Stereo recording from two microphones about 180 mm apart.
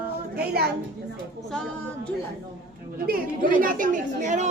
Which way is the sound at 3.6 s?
50° right (ahead or behind).